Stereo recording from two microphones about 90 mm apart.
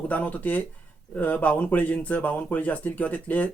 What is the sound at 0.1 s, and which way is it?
Speech, 15° left (ahead or behind).